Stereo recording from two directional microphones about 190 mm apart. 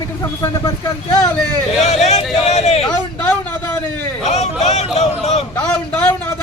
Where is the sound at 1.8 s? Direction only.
35° left (ahead or behind).